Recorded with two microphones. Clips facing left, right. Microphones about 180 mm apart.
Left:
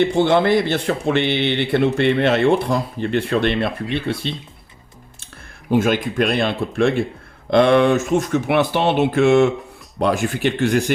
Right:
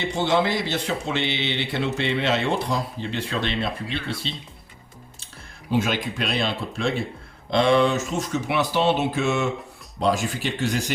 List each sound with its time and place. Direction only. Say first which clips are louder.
0.0 s speech: left 7 dB; 55° left (ahead or behind)
5.7 s speech: left 7 dB; 50° left (ahead or behind)